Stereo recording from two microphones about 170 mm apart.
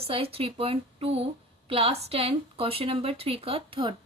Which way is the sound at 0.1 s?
35° right (ahead or behind).